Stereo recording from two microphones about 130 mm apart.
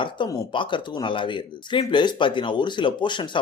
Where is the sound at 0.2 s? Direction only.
40° left (ahead or behind).